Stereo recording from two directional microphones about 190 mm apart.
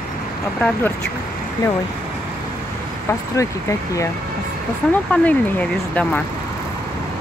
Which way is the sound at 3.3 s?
15° left (ahead or behind).